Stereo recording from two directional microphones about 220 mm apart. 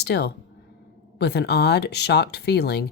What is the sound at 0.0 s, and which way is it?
Speech, 50° left (ahead or behind).